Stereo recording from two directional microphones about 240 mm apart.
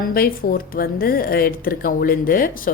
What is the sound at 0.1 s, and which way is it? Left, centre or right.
Speech, left.